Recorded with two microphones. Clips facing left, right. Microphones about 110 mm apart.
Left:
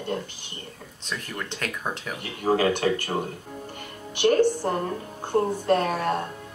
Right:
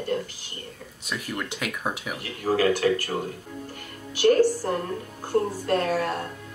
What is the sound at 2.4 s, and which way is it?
Speech, 20° left (ahead or behind).